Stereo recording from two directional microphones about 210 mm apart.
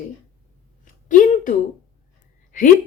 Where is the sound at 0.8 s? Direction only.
40° left (ahead or behind).